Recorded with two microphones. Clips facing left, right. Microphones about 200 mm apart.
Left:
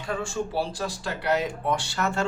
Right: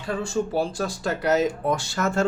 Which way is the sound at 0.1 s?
40° right (ahead or behind).